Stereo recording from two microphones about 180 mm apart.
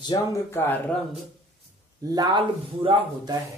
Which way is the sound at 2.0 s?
20° right (ahead or behind).